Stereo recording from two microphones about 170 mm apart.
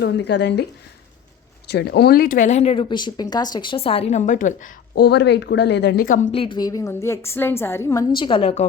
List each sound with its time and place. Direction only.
0.0 s speech: 85° left
1.7 s speech: 75° left (ahead or behind)
6.1 s speech: 45° left (ahead or behind)
6.3 s a woman's voice: 30° left (ahead or behind)